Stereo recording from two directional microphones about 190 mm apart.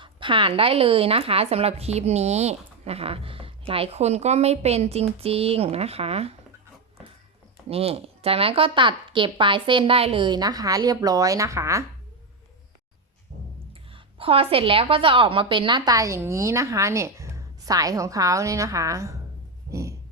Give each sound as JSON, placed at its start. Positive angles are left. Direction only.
{"t": 0.0, "sound": "speech", "side_deg": -25}
{"t": 7.7, "sound": "speech", "side_deg": -30}
{"t": 13.9, "sound": "a woman's voice", "side_deg": -30}